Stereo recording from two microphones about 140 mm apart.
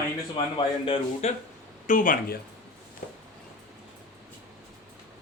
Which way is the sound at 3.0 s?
70° left (ahead or behind).